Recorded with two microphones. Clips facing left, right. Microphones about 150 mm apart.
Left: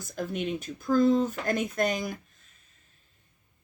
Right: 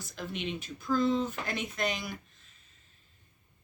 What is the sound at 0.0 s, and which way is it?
Speech, 45° left (ahead or behind).